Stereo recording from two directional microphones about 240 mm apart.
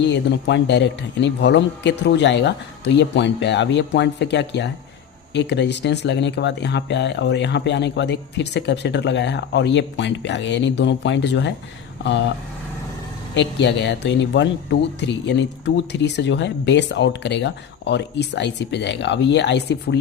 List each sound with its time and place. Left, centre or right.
0.0 s speech: left
13.3 s speech: left